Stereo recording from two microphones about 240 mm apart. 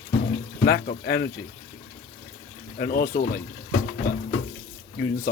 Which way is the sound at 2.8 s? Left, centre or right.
Left.